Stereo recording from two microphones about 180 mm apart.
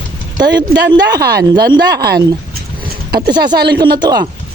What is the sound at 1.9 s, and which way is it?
Speech, 60° right (ahead or behind).